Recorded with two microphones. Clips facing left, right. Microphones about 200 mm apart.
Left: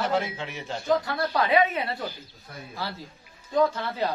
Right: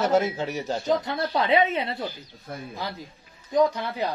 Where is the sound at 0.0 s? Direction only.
45° right (ahead or behind).